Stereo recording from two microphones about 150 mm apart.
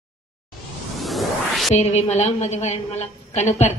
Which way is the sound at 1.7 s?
45° left (ahead or behind).